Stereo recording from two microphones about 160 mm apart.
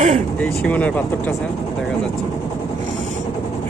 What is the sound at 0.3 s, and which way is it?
Speech, 10° left (ahead or behind).